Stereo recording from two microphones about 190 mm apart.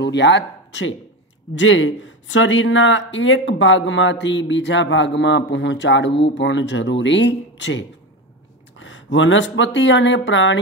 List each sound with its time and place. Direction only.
0.0 s speech: 65° left (ahead or behind)
1.5 s speech: 80° left